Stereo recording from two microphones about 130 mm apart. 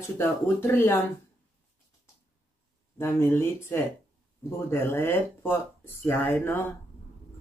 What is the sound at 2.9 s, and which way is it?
Speech, 20° left (ahead or behind).